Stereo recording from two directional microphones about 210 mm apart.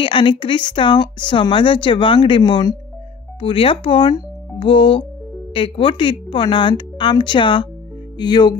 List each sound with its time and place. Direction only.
0.0 s speech: 25° left (ahead or behind)